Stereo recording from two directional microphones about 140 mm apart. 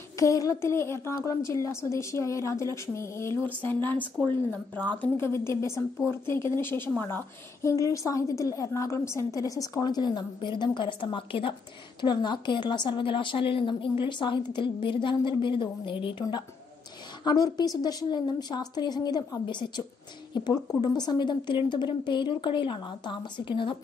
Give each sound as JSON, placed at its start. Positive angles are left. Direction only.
{"t": 0.2, "sound": "a woman's voice", "side_deg": 25}